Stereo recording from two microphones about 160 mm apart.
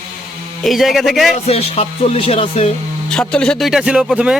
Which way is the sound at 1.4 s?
40° left (ahead or behind).